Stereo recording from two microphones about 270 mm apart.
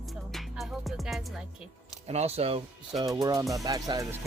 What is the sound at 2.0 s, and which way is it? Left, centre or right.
Speech, right.